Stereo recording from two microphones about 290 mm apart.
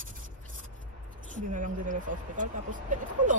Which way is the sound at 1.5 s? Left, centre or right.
Right.